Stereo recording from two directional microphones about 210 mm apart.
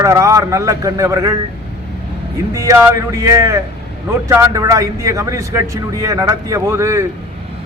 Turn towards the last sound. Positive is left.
turn(degrees=-15)  # may be behind; listen again after turning